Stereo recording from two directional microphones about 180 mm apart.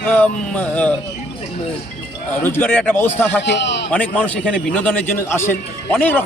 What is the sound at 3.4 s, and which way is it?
Speech, 75° left (ahead or behind).